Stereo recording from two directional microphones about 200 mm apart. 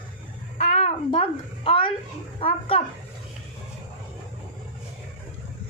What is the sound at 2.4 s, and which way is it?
Speech, 30° left (ahead or behind).